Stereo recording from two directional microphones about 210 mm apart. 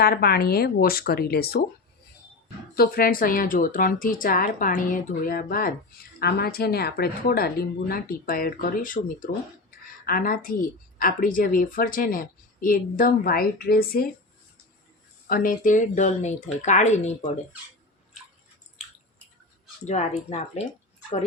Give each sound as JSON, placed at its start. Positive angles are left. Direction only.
{"t": 0.0, "sound": "a woman's voice", "side_deg": 45}
{"t": 2.7, "sound": "a woman's voice", "side_deg": 45}
{"t": 15.3, "sound": "a woman's voice", "side_deg": 45}
{"t": 19.8, "sound": "a woman's voice", "side_deg": 35}